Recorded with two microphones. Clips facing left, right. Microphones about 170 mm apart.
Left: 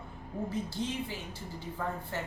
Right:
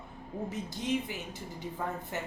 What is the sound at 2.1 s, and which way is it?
Speech, 15° right (ahead or behind).